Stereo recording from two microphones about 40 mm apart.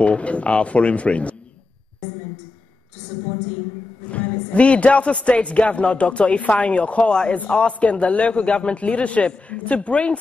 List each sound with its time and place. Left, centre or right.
0.0 s a man's voice: left
4.1 s music: left
5.2 s a man's voice: left